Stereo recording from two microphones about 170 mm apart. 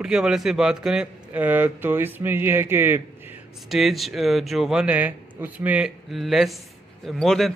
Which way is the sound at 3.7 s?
Centre (ahead or behind).